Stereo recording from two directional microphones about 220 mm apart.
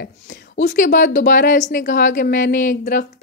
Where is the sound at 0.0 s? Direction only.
45° left (ahead or behind).